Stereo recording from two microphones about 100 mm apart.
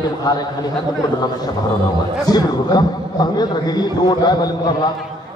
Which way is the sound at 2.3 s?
40° left (ahead or behind).